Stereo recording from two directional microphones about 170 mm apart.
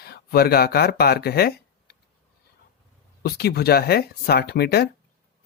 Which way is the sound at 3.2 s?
70° left (ahead or behind).